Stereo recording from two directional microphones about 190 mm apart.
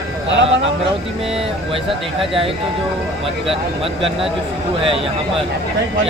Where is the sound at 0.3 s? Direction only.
75° right (ahead or behind).